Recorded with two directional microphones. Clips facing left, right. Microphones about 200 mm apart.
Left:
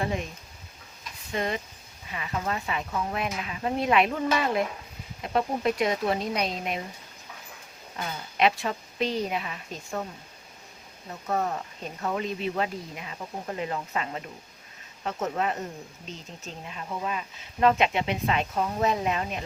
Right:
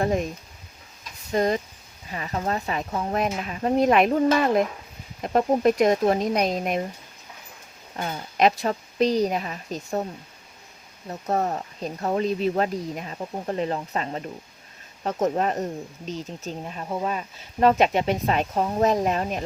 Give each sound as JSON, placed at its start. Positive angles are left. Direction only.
{"t": 1.3, "sound": "speech", "side_deg": -40}
{"t": 8.1, "sound": "speech", "side_deg": -40}
{"t": 11.1, "sound": "speech", "side_deg": -40}
{"t": 16.6, "sound": "speech", "side_deg": -40}